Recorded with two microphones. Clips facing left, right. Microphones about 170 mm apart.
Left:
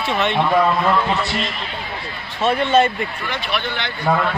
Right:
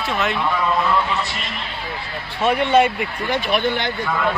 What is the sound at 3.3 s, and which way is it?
Speech, 45° right (ahead or behind).